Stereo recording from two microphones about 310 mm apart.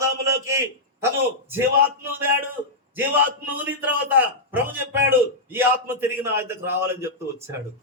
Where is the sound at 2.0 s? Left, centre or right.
Centre.